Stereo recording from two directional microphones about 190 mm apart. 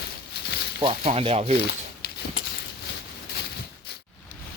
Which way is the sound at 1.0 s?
30° right (ahead or behind).